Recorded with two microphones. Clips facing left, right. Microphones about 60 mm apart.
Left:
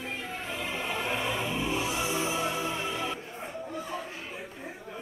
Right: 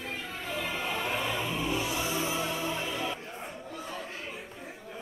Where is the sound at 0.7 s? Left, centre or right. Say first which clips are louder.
Left 1 dB; left.